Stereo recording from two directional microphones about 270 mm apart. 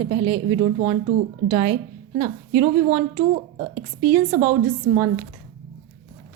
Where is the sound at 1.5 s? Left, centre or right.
Centre.